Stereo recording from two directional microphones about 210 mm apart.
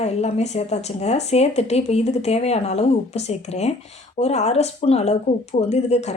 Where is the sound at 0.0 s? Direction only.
30° left (ahead or behind).